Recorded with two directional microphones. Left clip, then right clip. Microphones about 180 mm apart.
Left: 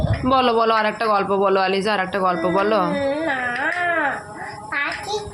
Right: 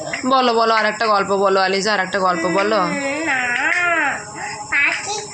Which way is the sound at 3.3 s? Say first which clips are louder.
Right 4 dB; 20° left (ahead or behind).